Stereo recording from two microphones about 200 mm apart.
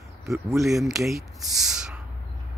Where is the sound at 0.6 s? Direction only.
Centre (ahead or behind).